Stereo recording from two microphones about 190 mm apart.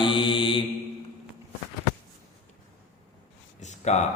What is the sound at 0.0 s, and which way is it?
Mantra, 25° left (ahead or behind).